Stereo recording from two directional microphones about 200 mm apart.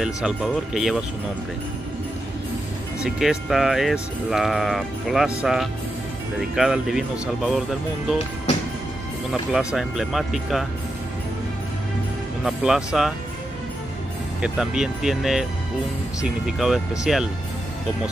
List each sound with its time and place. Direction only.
0.0 s speech: 5° right (ahead or behind)
3.0 s speech: centre (ahead or behind)
9.3 s speech: 5° right (ahead or behind)
12.4 s speech: centre (ahead or behind)
14.4 s speech: 5° right (ahead or behind)